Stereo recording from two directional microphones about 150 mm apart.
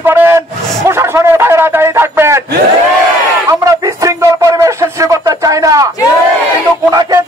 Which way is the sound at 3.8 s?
20° right (ahead or behind).